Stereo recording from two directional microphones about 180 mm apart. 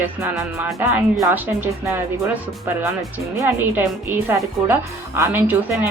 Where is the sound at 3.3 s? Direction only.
10° right (ahead or behind).